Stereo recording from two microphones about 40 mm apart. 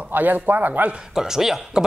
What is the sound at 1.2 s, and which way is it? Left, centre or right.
Speech, centre.